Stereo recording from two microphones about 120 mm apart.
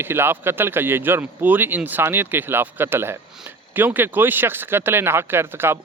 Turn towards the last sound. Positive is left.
turn(degrees=-20)  # may be behind; listen again after turning